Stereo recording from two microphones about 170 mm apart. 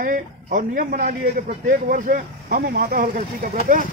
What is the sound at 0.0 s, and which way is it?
A man's voice, 55° right (ahead or behind).